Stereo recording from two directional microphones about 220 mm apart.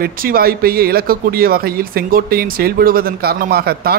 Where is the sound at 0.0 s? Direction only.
40° right (ahead or behind).